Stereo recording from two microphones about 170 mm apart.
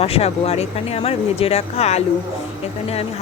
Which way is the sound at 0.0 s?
35° left (ahead or behind).